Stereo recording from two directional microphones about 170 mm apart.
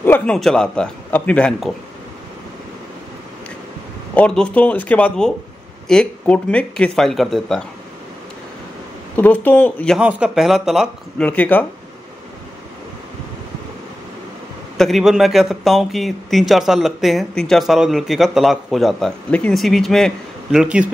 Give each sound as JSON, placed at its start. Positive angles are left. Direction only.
{"t": 0.0, "sound": "a sound", "side_deg": 10}
{"t": 0.4, "sound": "speech", "side_deg": 5}
{"t": 4.1, "sound": "speech", "side_deg": 5}
{"t": 9.1, "sound": "speech", "side_deg": 10}
{"t": 9.9, "sound": "speech", "side_deg": -5}
{"t": 11.2, "sound": "speech", "side_deg": 10}
{"t": 14.8, "sound": "speech", "side_deg": 0}